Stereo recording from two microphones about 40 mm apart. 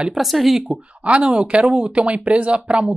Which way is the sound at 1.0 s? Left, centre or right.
Right.